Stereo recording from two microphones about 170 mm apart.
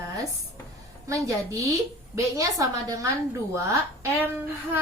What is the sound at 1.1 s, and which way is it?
Speech, 20° right (ahead or behind).